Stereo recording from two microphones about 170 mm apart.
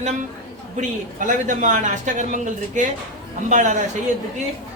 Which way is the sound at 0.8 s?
50° right (ahead or behind).